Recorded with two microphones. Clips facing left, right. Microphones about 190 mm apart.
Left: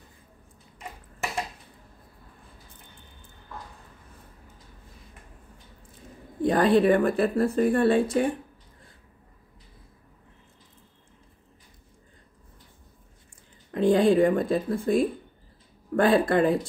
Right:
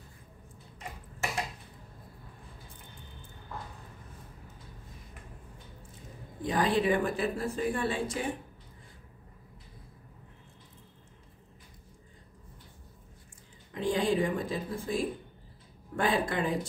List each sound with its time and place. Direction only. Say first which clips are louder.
6.4 s speech: left 8 dB; 60° left (ahead or behind)
13.7 s speech: left 9 dB; 60° left (ahead or behind)
16.0 s speech: left 9 dB; 60° left (ahead or behind)